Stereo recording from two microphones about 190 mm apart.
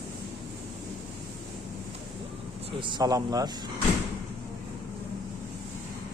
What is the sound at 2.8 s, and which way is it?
Speech, 25° right (ahead or behind).